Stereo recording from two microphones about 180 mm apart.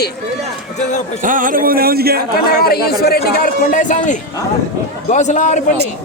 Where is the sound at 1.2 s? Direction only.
50° right (ahead or behind).